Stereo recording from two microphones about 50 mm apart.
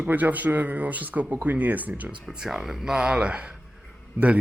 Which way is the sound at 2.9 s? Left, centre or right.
Centre.